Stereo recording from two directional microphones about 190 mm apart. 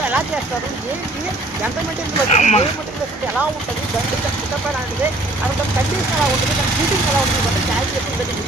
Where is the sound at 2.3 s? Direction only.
35° left (ahead or behind).